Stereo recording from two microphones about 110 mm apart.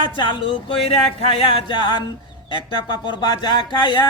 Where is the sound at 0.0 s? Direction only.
45° left (ahead or behind).